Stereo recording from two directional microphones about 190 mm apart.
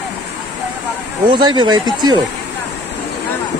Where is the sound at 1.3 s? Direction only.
25° right (ahead or behind).